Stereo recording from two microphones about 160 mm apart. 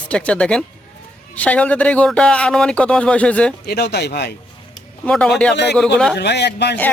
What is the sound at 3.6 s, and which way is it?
Speech, 90° left.